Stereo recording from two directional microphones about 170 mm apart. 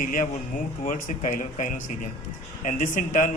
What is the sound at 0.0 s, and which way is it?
A man's voice, 50° left (ahead or behind).